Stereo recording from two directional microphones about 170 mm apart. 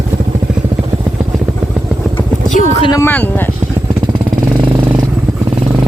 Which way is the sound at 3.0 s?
10° left (ahead or behind).